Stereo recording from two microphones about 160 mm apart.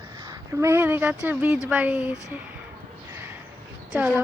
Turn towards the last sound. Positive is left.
turn(degrees=-5)  # may be behind; listen again after turning